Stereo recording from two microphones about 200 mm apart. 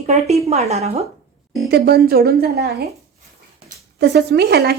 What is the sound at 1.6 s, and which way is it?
Speech, 50° right (ahead or behind).